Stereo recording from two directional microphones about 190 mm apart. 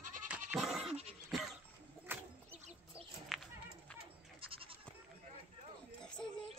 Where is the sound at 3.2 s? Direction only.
Centre (ahead or behind).